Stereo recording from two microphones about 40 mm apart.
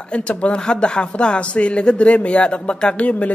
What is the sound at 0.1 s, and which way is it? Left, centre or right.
Speech, left.